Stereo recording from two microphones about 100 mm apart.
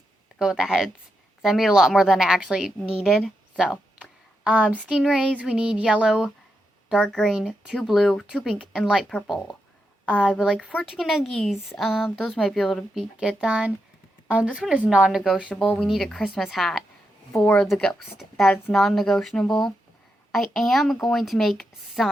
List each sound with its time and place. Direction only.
0.3 s a woman's voice: 5° right (ahead or behind)
6.9 s speech: 5° left (ahead or behind)
7.3 s speech: 5° right (ahead or behind); by 10.4 s 10° left (ahead or behind)
10.4 s speech: 5° right (ahead or behind)
15.4 s speech: 15° left (ahead or behind)
17.3 s speech: 15° left (ahead or behind)
17.7 s speech: centre (ahead or behind)